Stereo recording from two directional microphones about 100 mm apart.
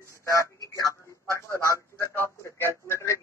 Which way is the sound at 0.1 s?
30° left (ahead or behind).